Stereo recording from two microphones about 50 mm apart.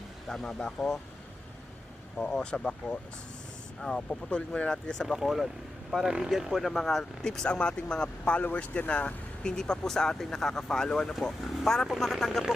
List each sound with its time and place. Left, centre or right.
0.3 s speech: centre
2.1 s speech: centre
4.1 s speech: left
5.0 s speech: centre
6.1 s speech: centre
7.3 s speech: centre